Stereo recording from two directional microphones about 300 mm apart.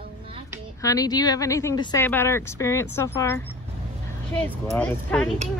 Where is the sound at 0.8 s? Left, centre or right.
Centre.